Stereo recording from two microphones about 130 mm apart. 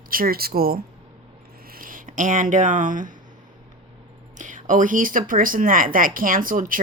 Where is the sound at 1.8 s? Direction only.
90° right.